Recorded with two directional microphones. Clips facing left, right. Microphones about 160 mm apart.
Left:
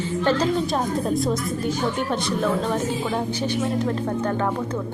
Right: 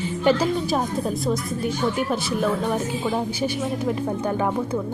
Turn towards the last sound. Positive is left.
turn(degrees=-15)  # may be behind; listen again after turning